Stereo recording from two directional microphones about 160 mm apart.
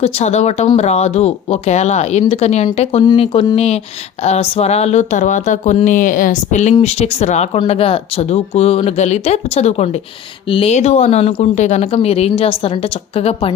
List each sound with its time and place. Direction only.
0.0 s speech: 40° left (ahead or behind)
3.0 s speech: 25° left (ahead or behind)
3.5 s speech: 40° left (ahead or behind)